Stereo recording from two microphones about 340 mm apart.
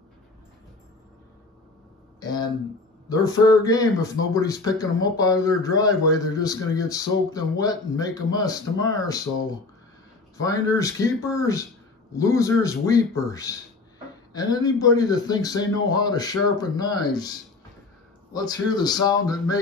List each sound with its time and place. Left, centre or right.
2.1 s speech: centre
10.4 s speech: centre
12.1 s speech: centre
18.3 s speech: centre